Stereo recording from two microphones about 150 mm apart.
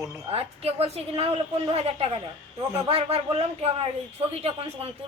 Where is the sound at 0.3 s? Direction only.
40° right (ahead or behind).